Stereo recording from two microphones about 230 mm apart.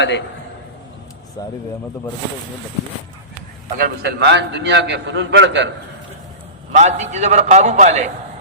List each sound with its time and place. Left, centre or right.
1.4 s speech: centre
3.8 s a man's voice: right
6.7 s a man's voice: right